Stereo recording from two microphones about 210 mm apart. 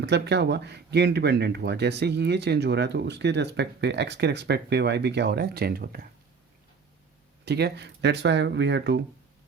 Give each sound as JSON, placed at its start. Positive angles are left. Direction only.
{"t": 0.0, "sound": "speech", "side_deg": -55}
{"t": 7.4, "sound": "speech", "side_deg": -50}